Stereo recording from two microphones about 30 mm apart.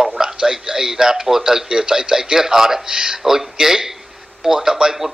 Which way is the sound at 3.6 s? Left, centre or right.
Centre.